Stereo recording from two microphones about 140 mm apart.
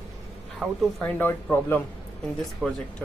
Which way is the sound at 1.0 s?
15° left (ahead or behind).